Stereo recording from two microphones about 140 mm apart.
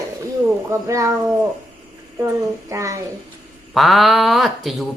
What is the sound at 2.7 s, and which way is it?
Speech, 20° right (ahead or behind).